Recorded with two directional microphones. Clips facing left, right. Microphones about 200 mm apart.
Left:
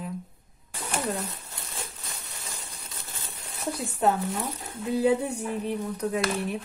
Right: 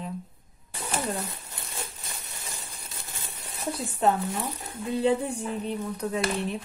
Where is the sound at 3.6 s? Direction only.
5° left (ahead or behind).